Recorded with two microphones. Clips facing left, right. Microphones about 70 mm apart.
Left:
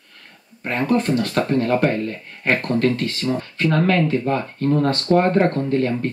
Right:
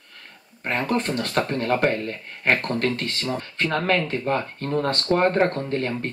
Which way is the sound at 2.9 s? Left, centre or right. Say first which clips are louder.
Left 5 dB; right.